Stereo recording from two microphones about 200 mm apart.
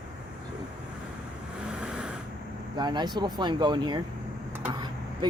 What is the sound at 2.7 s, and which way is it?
Speech, 20° right (ahead or behind).